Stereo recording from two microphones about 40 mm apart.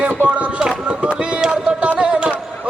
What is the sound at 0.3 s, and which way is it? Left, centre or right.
Chop, right.